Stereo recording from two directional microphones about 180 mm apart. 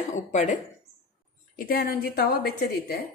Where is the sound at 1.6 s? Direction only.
55° left (ahead or behind).